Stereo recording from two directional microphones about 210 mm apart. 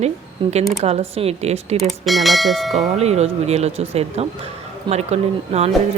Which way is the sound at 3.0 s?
30° right (ahead or behind).